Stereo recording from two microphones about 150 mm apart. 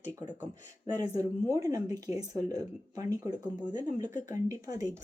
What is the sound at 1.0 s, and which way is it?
Speech, 25° right (ahead or behind).